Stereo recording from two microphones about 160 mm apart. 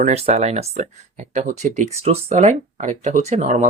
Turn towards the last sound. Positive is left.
turn(degrees=-45)  # may be behind; listen again after turning